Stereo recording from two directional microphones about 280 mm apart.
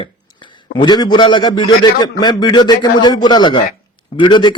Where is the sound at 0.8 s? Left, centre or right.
Centre.